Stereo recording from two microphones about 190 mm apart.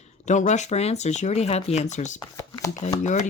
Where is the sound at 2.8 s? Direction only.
40° left (ahead or behind).